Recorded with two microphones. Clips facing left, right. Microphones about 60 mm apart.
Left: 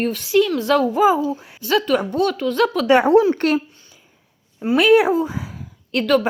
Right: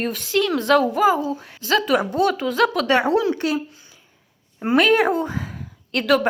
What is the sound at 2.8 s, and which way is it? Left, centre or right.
Speech, left.